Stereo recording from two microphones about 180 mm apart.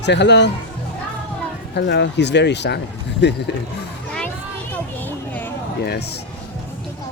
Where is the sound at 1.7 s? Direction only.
70° left (ahead or behind).